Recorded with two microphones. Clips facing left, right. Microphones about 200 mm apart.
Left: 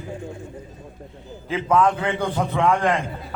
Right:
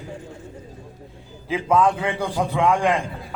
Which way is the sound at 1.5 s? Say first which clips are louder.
Even; 10° right (ahead or behind).